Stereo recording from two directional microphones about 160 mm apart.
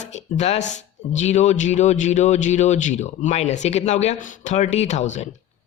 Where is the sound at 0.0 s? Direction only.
45° left (ahead or behind).